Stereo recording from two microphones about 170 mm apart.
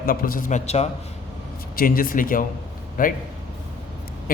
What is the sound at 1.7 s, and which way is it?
A man's voice, 60° left (ahead or behind).